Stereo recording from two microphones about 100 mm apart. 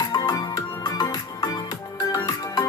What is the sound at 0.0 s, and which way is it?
Music, 35° left (ahead or behind).